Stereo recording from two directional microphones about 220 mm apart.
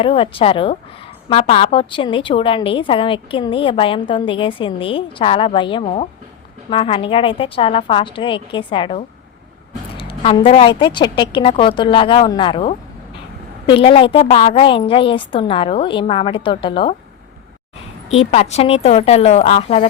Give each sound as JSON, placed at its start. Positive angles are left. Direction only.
{"t": 0.0, "sound": "a woman's voice", "side_deg": 25}
{"t": 18.2, "sound": "a woman's voice", "side_deg": 30}